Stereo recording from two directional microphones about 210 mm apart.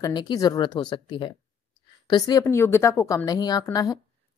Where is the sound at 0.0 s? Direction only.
20° left (ahead or behind).